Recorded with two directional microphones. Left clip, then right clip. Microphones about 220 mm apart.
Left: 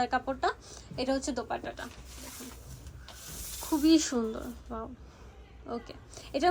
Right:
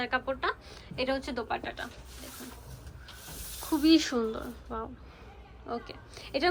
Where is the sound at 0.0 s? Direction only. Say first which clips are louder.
Left 1 dB; 15° left (ahead or behind).